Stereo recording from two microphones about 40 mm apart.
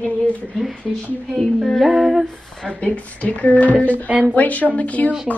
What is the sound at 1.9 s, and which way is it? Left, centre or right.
Speech, centre.